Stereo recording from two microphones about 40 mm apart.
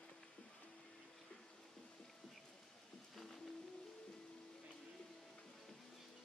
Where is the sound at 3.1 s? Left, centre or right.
Centre.